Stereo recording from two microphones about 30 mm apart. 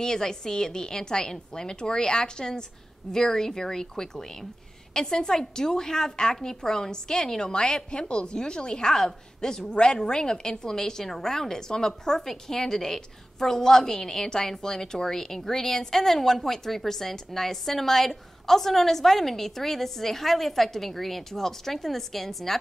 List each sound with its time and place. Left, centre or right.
0.0 s a woman's voice: centre
3.1 s a woman's voice: centre
8.1 s a woman's voice: left
9.7 s a woman's voice: left; by 22.6 s centre